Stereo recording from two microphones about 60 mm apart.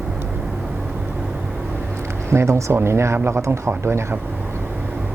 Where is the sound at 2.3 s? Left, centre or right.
Right.